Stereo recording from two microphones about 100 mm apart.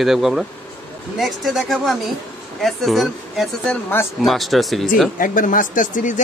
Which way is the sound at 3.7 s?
20° left (ahead or behind).